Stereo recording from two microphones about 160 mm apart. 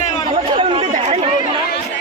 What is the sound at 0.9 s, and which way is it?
Chatter, 45° right (ahead or behind).